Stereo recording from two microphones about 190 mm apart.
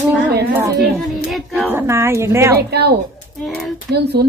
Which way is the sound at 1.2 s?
Centre (ahead or behind).